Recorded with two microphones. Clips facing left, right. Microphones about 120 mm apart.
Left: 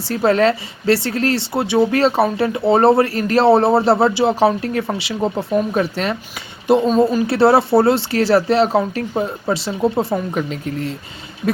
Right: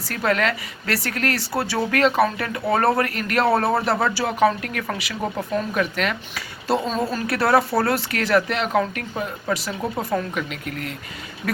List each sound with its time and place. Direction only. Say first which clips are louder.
0.0 s speech: left 7 dB; 30° left (ahead or behind)
6.7 s speech: left 9 dB; 20° left (ahead or behind)